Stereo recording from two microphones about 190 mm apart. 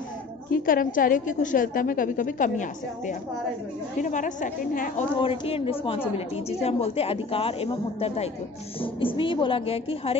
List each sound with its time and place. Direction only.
0.5 s a woman's voice: 45° left (ahead or behind)
5.2 s a woman's voice: 30° left (ahead or behind)